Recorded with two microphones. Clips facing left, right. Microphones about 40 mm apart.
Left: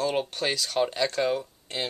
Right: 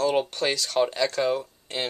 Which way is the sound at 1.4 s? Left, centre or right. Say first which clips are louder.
Right 2 dB; centre.